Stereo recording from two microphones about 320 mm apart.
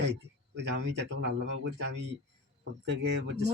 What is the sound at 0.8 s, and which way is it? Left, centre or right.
Speech, right.